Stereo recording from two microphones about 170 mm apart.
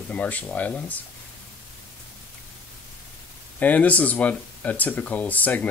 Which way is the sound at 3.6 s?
10° left (ahead or behind).